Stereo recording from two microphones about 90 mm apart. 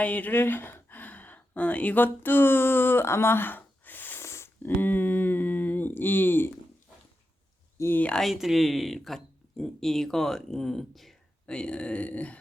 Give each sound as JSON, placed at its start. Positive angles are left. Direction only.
{"t": 0.0, "sound": "a sound", "side_deg": 15}
{"t": 7.8, "sound": "speech", "side_deg": 25}
{"t": 8.2, "sound": "speech", "side_deg": -5}